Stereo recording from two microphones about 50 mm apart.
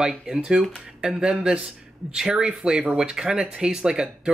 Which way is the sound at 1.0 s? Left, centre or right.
Centre.